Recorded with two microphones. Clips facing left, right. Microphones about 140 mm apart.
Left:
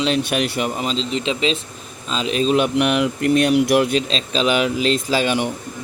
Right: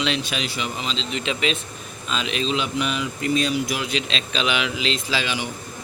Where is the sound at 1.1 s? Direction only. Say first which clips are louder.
Left 2 dB; 30° left (ahead or behind); by 4.0 s 55° left (ahead or behind).